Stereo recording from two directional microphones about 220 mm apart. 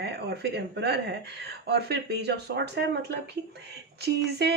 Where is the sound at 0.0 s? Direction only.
50° right (ahead or behind).